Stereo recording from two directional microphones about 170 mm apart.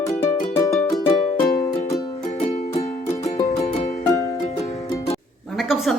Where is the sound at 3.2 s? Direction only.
20° left (ahead or behind).